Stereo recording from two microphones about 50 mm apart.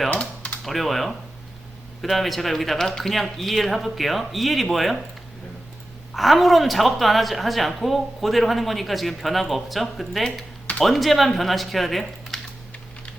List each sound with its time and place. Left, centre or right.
0.1 s typing: left
0.6 s a woman's voice: centre
6.1 s a woman's voice: centre